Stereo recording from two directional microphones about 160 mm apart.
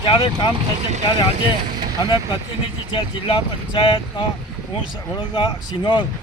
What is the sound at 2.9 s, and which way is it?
Speech, 30° left (ahead or behind).